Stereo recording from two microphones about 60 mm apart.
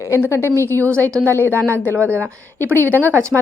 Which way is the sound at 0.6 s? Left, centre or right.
Left.